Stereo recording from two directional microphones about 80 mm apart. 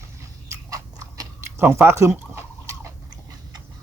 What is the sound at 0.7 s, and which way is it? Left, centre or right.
Biting, right.